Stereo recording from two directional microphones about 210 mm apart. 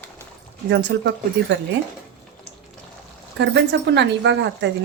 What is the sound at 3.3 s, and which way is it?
Speech, 55° right (ahead or behind).